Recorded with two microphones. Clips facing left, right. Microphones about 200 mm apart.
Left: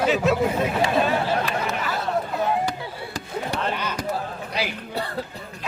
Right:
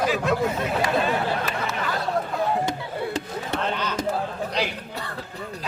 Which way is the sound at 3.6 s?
10° left (ahead or behind).